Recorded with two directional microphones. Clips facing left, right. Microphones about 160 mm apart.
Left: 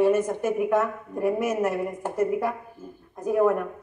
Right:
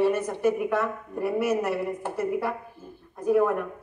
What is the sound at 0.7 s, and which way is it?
A woman's voice, 15° left (ahead or behind).